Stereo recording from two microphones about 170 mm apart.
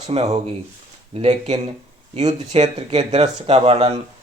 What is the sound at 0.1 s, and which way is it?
Speech, 35° right (ahead or behind).